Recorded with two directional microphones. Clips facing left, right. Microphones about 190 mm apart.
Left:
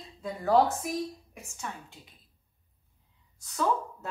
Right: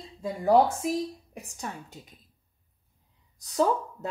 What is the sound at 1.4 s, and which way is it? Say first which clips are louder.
Speech: right 2 dB; 40° right (ahead or behind).